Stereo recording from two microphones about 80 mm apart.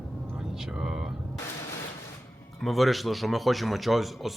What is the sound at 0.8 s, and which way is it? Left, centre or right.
Speech, centre.